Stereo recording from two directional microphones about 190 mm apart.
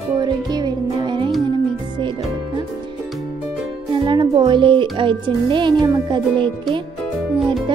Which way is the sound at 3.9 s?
25° right (ahead or behind).